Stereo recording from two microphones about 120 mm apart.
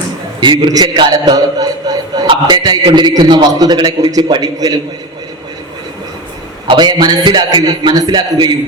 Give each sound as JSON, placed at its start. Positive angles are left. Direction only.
{"t": 0.3, "sound": "a man's voice", "side_deg": -40}
{"t": 2.2, "sound": "a man's voice", "side_deg": -40}
{"t": 6.7, "sound": "a man's voice", "side_deg": -40}